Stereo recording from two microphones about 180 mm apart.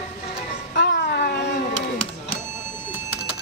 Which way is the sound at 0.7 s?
60° left (ahead or behind).